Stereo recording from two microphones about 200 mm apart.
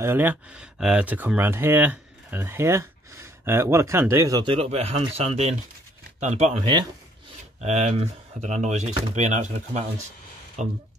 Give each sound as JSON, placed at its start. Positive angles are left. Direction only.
{"t": 0.0, "sound": "speech", "side_deg": -10}